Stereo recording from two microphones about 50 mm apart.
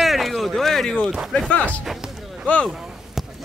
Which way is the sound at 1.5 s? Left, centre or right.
Left.